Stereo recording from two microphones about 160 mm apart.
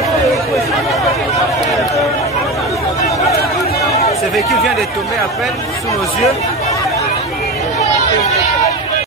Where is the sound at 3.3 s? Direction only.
20° left (ahead or behind).